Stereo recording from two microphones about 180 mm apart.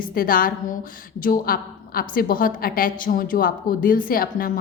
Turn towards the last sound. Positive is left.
turn(degrees=50)  # may be behind; listen again after turning